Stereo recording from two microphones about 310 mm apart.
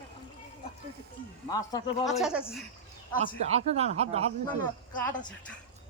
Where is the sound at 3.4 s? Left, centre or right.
Centre.